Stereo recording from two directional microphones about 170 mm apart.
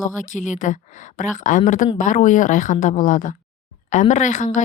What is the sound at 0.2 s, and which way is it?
Speech, 45° left (ahead or behind).